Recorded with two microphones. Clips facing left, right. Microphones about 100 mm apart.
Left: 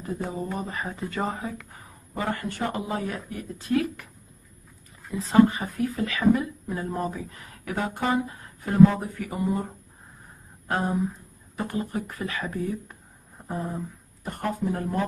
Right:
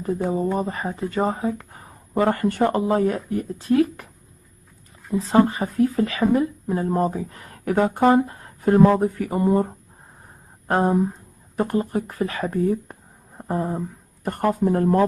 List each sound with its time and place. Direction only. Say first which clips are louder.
0.6 s speech: right 6 dB; 35° right (ahead or behind)
1.7 s speech: right 5 dB; 45° right (ahead or behind)
5.1 s speech: right 1 dB; 35° right (ahead or behind)
10.7 s speech: right 7 dB; 45° right (ahead or behind)
13.5 s speech: right 7 dB; 60° right (ahead or behind)